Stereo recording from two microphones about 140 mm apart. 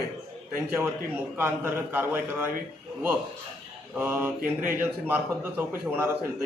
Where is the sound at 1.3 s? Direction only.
15° right (ahead or behind).